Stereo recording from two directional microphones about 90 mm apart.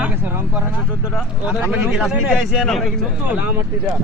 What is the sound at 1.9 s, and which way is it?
Speech, 5° right (ahead or behind).